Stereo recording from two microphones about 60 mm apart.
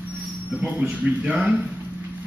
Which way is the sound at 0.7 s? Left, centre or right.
Centre.